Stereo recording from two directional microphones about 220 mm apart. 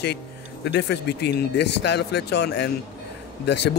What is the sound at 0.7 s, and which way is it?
Speech, 50° left (ahead or behind).